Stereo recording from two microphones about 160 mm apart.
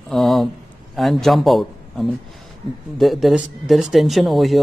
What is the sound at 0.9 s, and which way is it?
A man's voice, centre (ahead or behind).